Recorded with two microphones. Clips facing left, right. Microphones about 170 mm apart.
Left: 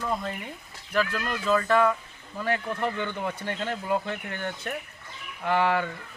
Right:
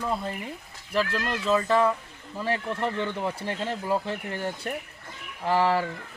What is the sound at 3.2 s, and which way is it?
Speech, 30° right (ahead or behind).